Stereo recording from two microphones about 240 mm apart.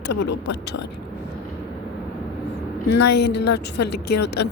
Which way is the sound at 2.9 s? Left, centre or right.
Left.